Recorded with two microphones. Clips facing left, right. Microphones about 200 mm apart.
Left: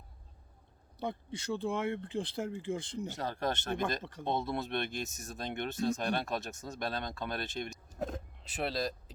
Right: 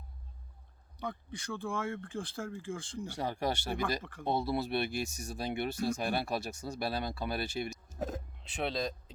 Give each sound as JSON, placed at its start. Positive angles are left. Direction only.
{"t": 1.0, "sound": "speech", "side_deg": 25}
{"t": 3.2, "sound": "speech", "side_deg": -10}